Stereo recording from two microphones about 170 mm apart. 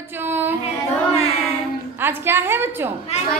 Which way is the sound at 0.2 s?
10° right (ahead or behind).